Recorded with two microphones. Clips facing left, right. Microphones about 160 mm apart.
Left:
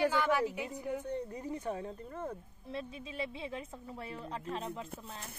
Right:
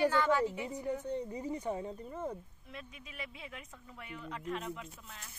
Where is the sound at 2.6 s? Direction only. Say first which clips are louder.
Left 8 dB; 30° left (ahead or behind).